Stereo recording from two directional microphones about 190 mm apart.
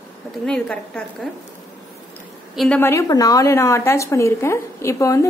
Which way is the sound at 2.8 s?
15° left (ahead or behind).